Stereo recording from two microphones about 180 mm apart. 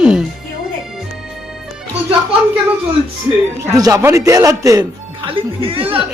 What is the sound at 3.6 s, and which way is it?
Speech, 20° right (ahead or behind).